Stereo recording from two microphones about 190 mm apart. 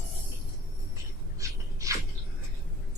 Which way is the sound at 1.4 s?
15° right (ahead or behind).